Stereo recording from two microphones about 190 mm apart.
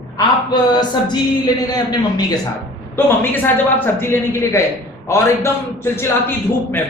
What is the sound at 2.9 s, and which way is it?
A man's voice, 10° left (ahead or behind).